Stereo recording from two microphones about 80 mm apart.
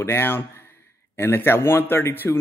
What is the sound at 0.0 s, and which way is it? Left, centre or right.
A man's voice, left.